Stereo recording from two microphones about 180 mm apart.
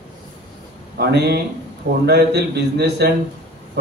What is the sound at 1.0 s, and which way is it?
A man's voice, 65° right (ahead or behind).